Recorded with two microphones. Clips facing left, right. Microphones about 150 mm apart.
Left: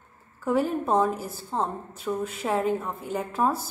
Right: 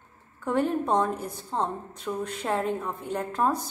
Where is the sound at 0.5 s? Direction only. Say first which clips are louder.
Left 1 dB; 5° left (ahead or behind).